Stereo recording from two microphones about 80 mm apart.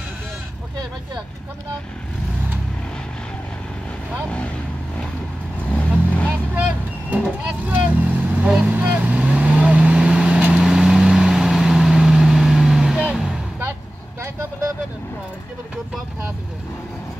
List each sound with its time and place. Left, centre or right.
5.7 s vehicle: centre
7.6 s vehicle: right
13.1 s a sound: centre
14.2 s vehicle: right